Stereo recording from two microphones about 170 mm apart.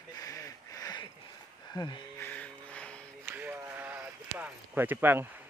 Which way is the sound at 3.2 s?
10° right (ahead or behind).